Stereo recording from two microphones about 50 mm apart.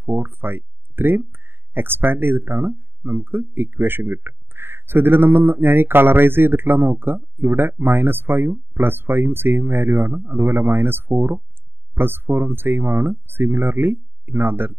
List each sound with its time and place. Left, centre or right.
0.0 s speech: right